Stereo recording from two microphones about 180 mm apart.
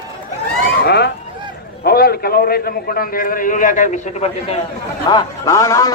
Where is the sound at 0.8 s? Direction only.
65° left (ahead or behind); by 4.5 s 40° left (ahead or behind).